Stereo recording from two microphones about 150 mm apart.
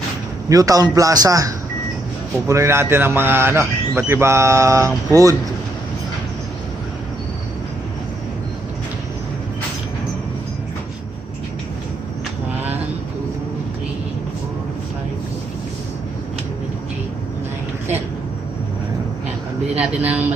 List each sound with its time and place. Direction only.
0.4 s a man's voice: 25° right (ahead or behind)
19.8 s a man's voice: 10° right (ahead or behind)